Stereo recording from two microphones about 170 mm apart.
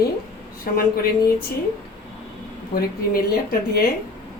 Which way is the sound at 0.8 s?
60° left (ahead or behind).